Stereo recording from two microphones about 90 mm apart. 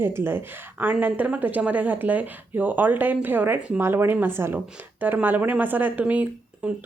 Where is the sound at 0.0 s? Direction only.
25° right (ahead or behind).